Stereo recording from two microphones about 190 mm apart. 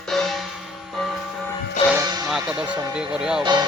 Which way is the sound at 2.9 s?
5° right (ahead or behind).